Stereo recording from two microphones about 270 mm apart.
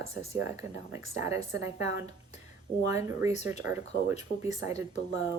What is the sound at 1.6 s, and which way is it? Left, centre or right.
Speech, right.